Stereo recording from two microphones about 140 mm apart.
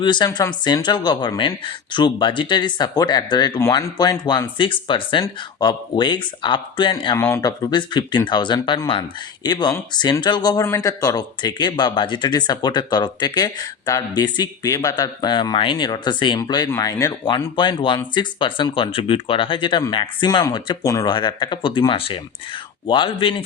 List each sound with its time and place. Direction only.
0.0 s speech: 30° left (ahead or behind)
7.2 s speech: 15° left (ahead or behind)
17.2 s speech: 35° left (ahead or behind)